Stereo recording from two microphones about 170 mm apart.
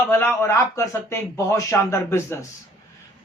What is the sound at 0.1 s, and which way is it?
Speech, 15° left (ahead or behind).